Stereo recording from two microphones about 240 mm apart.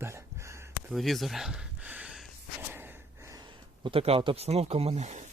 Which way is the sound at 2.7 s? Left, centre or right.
Centre.